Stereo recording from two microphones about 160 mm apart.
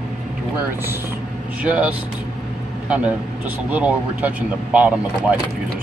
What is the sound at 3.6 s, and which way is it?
Speech, 10° right (ahead or behind).